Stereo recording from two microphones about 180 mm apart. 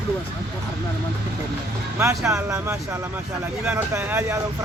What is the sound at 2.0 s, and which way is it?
Speech, 15° right (ahead or behind).